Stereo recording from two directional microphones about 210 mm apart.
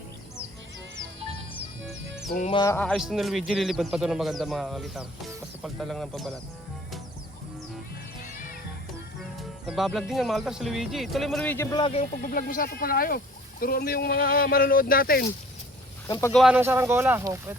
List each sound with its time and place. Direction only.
2.5 s music: 20° left (ahead or behind)
2.7 s a man's voice: 5° left (ahead or behind)
9.6 s speech: centre (ahead or behind); by 15.3 s 45° left (ahead or behind)
16.0 s speech: 15° left (ahead or behind)
16.3 s a man's voice: centre (ahead or behind)